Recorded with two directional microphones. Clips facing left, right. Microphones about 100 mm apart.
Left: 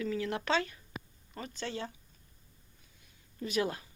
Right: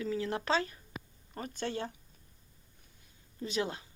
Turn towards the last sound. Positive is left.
turn(degrees=-25)  # may be behind; listen again after turning